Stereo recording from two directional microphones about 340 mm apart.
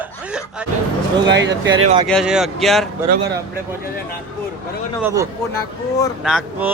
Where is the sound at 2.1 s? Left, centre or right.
Centre.